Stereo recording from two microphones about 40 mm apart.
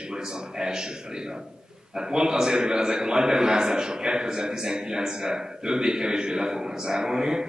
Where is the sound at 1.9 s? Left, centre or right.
Centre.